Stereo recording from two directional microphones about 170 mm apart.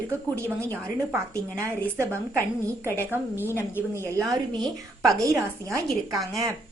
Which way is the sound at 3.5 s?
15° left (ahead or behind).